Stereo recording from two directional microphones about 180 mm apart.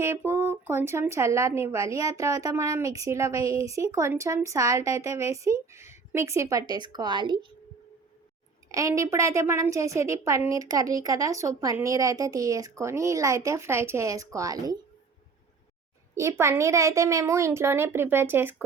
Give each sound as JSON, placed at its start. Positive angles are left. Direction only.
{"t": 0.0, "sound": "speech", "side_deg": -15}
{"t": 8.7, "sound": "speech", "side_deg": -15}
{"t": 16.1, "sound": "speech", "side_deg": -15}